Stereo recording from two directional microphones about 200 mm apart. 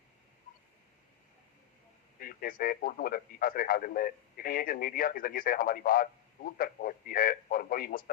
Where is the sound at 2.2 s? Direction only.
45° left (ahead or behind).